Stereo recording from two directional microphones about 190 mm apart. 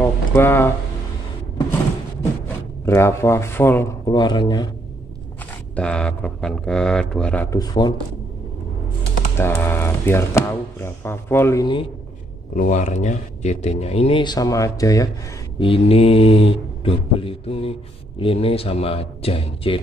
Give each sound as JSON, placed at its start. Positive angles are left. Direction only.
{"t": 0.0, "sound": "speech", "side_deg": 10}
{"t": 2.8, "sound": "speech", "side_deg": 15}
{"t": 4.1, "sound": "mantra", "side_deg": 25}
{"t": 5.8, "sound": "speech", "side_deg": 5}
{"t": 7.5, "sound": "mantra", "side_deg": 20}
{"t": 9.4, "sound": "speech", "side_deg": 10}
{"t": 12.5, "sound": "speech", "side_deg": 40}
{"t": 15.6, "sound": "mantra", "side_deg": 30}